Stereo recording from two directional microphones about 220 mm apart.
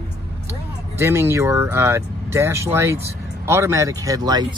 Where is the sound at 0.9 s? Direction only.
10° right (ahead or behind).